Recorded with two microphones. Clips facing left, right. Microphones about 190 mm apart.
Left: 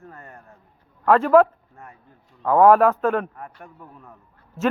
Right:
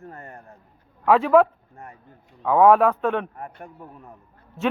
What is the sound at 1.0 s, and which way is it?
Speech, centre (ahead or behind).